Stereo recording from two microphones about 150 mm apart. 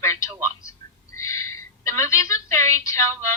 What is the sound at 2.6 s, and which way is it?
Speech, 20° left (ahead or behind).